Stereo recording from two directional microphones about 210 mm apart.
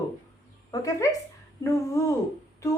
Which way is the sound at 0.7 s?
15° left (ahead or behind).